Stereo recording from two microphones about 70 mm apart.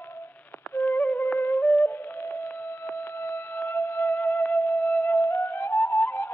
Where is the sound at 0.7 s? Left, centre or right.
Left.